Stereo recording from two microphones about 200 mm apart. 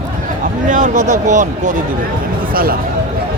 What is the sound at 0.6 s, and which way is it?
A man's voice, 40° right (ahead or behind).